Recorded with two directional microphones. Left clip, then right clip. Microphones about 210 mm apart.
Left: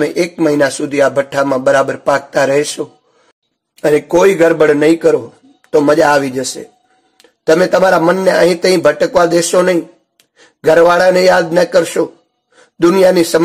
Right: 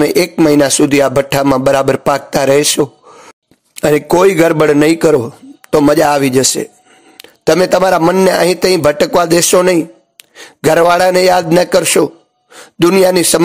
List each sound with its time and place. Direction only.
0.0 s speech: 40° right (ahead or behind)